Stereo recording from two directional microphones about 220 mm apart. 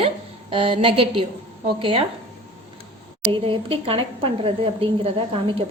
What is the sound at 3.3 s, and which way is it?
Speech, 25° right (ahead or behind).